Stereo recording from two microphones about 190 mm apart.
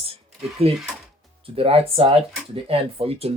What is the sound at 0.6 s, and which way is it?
Speech, 30° right (ahead or behind).